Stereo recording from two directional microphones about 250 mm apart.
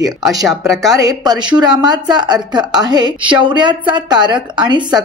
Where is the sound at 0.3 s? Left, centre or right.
Centre.